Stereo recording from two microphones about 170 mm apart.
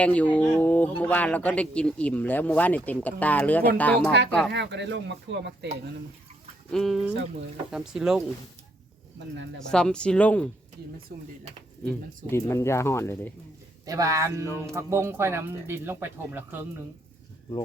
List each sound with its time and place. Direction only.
0.0 s speech: 10° left (ahead or behind)
4.5 s speech: 90° right
6.7 s speech: centre (ahead or behind)
9.6 s speech: 5° left (ahead or behind)
11.1 s speech: 65° right (ahead or behind)
11.9 s speech: 15° left (ahead or behind)
13.8 s speech: 20° right (ahead or behind)